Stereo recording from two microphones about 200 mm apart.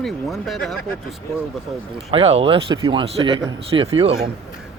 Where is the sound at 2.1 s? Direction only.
30° right (ahead or behind).